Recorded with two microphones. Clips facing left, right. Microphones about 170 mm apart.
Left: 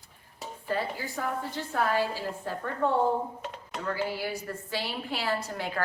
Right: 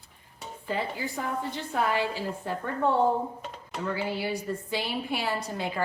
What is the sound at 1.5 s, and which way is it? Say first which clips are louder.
Speech: even; 20° right (ahead or behind).